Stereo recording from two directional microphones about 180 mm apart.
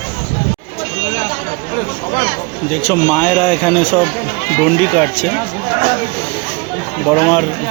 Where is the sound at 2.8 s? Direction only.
5° left (ahead or behind).